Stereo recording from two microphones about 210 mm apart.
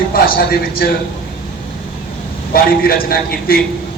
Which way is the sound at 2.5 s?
45° left (ahead or behind).